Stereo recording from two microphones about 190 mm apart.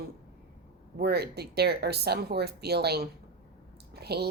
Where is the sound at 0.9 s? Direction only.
55° right (ahead or behind).